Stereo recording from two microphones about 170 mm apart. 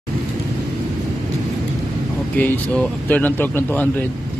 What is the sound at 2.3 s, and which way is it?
Speech, 10° left (ahead or behind).